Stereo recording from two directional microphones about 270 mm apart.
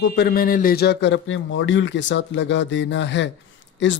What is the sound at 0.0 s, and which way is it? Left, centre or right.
A man's voice, left.